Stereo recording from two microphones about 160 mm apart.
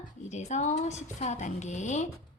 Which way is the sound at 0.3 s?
45° left (ahead or behind).